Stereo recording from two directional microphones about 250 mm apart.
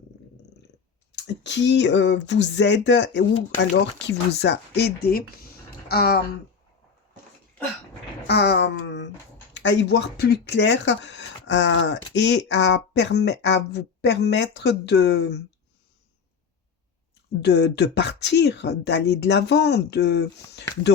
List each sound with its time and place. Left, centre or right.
1.1 s speech: left
8.3 s a sound: left
9.6 s speech: left
17.4 s speech: left